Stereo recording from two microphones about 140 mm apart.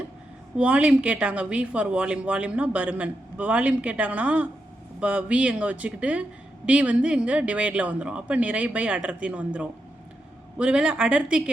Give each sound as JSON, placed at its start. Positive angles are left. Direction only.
{"t": 0.5, "sound": "speech", "side_deg": -10}